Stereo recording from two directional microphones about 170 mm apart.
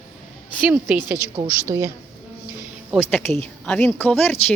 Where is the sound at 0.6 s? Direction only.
10° right (ahead or behind).